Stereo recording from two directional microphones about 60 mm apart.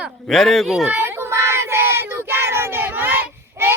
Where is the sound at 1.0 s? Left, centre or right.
Right.